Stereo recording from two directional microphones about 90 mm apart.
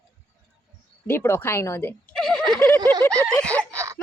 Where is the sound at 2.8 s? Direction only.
50° right (ahead or behind).